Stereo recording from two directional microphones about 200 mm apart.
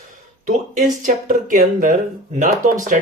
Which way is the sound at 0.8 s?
40° right (ahead or behind).